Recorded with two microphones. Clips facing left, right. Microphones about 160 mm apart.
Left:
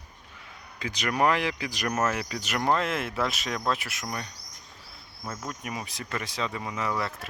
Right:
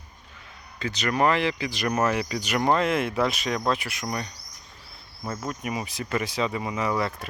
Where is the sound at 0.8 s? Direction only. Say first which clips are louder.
Right 2 dB; 10° left (ahead or behind).